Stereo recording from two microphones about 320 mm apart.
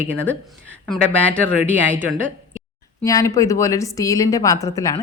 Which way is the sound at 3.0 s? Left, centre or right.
Centre.